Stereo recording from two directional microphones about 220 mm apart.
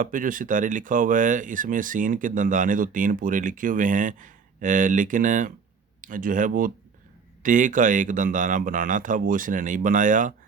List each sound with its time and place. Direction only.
0.0 s speech: 40° right (ahead or behind)